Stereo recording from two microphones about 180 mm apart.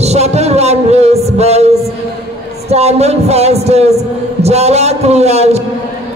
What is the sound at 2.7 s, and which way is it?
A man's voice, 35° right (ahead or behind).